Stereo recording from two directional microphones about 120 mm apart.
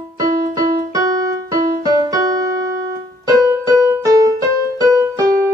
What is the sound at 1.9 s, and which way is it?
Keyboard, 30° right (ahead or behind).